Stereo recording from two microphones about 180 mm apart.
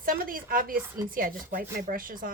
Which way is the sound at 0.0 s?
50° right (ahead or behind).